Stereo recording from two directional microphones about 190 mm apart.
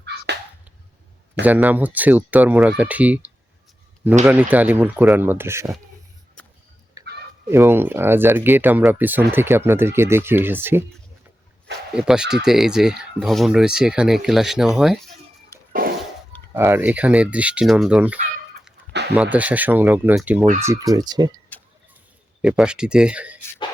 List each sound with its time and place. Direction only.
1.5 s speech: 10° right (ahead or behind)
7.0 s fowl: 20° right (ahead or behind)
7.5 s speech: 10° right (ahead or behind)
11.9 s speech: 5° right (ahead or behind)
15.5 s fart: 15° left (ahead or behind)
16.6 s speech: 10° right (ahead or behind)
22.4 s speech: 5° right (ahead or behind)